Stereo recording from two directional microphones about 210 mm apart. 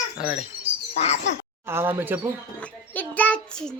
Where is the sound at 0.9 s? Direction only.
30° left (ahead or behind).